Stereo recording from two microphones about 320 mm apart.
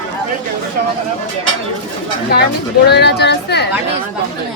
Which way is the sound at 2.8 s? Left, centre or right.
Left.